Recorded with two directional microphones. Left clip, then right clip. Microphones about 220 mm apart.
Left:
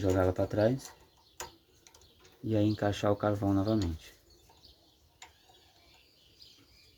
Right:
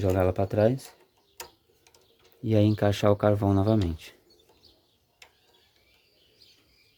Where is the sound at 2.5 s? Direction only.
50° right (ahead or behind).